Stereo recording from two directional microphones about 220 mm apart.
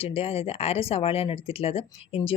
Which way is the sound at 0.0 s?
25° left (ahead or behind).